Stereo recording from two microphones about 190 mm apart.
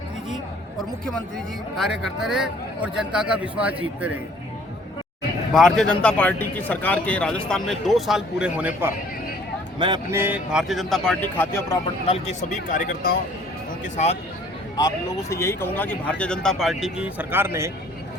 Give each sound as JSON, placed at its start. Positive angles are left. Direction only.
{"t": 1.7, "sound": "speech", "side_deg": 0}
{"t": 5.5, "sound": "speech", "side_deg": 0}
{"t": 9.7, "sound": "speech", "side_deg": -25}
{"t": 10.1, "sound": "speech", "side_deg": -10}
{"t": 12.0, "sound": "speech", "side_deg": 35}
{"t": 14.8, "sound": "speech", "side_deg": 15}